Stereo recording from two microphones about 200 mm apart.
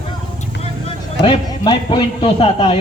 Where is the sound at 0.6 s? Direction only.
30° left (ahead or behind).